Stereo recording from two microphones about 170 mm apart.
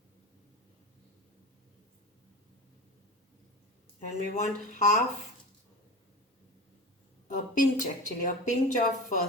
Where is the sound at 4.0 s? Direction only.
45° left (ahead or behind).